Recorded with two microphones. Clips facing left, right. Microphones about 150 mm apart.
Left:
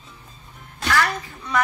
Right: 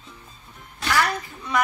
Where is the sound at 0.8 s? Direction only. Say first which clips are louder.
Left 1 dB; 15° right (ahead or behind).